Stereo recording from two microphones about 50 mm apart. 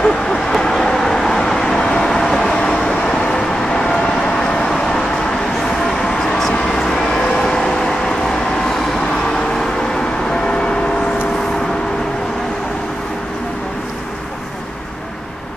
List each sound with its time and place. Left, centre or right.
0.0 s vehicle: centre
2.6 s vehicle: centre